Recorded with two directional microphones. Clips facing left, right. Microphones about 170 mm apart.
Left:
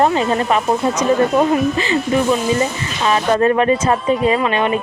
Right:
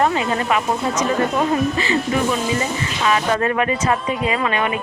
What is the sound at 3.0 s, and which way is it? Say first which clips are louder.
A woman's voice: left 4 dB; 30° left (ahead or behind).